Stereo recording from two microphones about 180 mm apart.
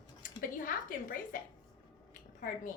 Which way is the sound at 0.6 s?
50° left (ahead or behind).